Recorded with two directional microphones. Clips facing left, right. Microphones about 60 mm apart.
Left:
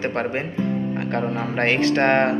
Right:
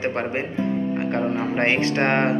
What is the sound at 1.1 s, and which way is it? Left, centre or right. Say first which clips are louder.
A man's voice: even; centre.